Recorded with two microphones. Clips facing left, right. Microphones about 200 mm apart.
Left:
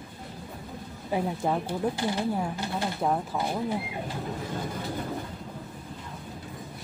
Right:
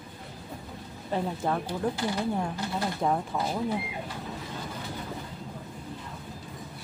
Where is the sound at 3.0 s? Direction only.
Centre (ahead or behind).